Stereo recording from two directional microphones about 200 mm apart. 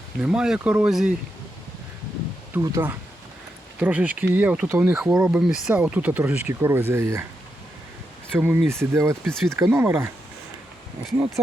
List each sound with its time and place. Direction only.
0.2 s speech: 5° right (ahead or behind)
2.5 s speech: 10° right (ahead or behind)
8.4 s speech: 5° right (ahead or behind)